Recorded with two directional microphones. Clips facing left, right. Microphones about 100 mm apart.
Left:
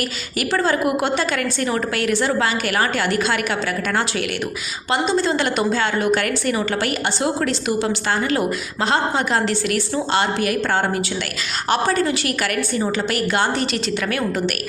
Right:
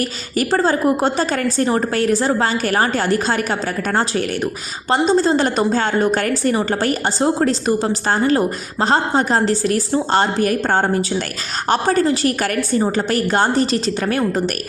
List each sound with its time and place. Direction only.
0.3 s a woman's voice: 35° right (ahead or behind)
4.9 s a woman's voice: 40° right (ahead or behind)